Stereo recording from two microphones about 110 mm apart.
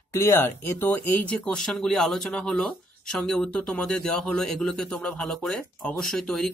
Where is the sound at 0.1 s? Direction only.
25° left (ahead or behind).